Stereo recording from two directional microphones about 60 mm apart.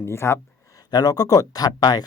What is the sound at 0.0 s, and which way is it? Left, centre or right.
Speech, left.